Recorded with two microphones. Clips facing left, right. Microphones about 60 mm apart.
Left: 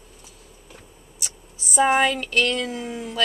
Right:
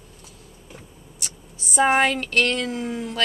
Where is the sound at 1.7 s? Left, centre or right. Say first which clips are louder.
Even; right.